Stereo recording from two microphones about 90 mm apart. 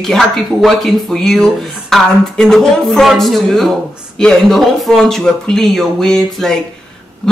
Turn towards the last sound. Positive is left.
turn(degrees=5)  # may be behind; listen again after turning